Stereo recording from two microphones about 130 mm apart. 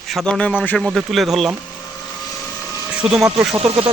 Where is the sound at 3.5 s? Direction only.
40° right (ahead or behind).